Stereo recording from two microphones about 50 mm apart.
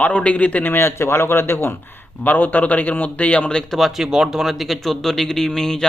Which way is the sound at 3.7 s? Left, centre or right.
Centre.